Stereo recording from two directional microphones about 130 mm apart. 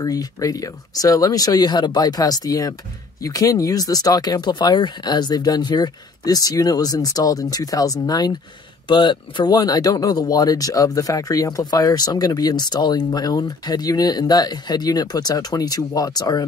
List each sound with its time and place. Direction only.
0.0 s speech: 25° left (ahead or behind)